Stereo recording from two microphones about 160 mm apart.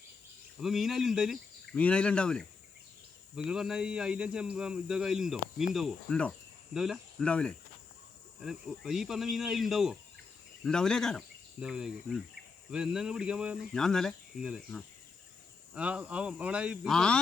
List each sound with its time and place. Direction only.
0.6 s speech: centre (ahead or behind)
1.7 s speech: 10° left (ahead or behind)